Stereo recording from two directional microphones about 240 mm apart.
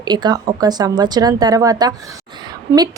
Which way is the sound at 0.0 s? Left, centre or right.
Centre.